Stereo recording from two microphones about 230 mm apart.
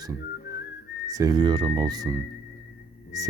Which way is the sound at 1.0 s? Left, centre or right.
Centre.